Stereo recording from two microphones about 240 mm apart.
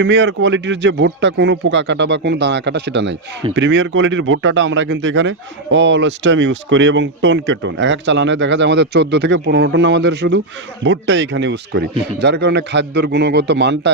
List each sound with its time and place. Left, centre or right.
0.0 s speech: right